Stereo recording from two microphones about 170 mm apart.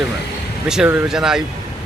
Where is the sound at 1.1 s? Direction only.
5° right (ahead or behind).